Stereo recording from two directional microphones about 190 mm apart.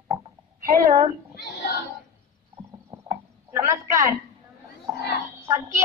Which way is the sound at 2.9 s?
15° right (ahead or behind).